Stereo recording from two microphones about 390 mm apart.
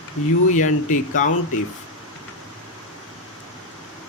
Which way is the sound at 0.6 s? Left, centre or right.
Centre.